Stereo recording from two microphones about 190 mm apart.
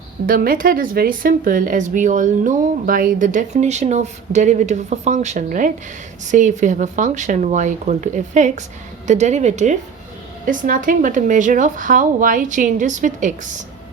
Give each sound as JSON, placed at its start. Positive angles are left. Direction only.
{"t": 0.3, "sound": "speech", "side_deg": -50}